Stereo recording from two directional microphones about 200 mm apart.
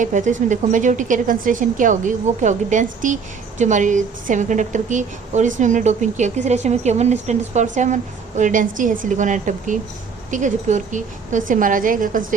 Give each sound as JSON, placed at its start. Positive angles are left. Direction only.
{"t": 0.0, "sound": "a woman's voice", "side_deg": -40}